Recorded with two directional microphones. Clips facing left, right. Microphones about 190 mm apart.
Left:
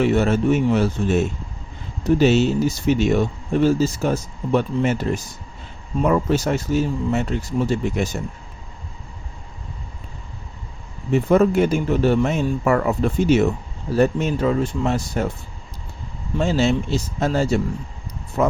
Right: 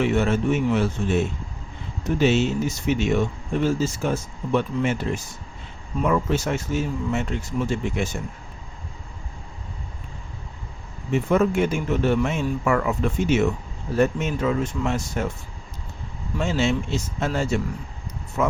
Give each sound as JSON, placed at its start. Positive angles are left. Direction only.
{"t": 0.0, "sound": "speech", "side_deg": 40}
{"t": 11.1, "sound": "speech", "side_deg": 35}
{"t": 16.4, "sound": "speech", "side_deg": 35}